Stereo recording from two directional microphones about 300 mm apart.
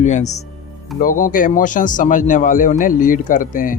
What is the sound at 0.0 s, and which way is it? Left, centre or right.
Speech, left.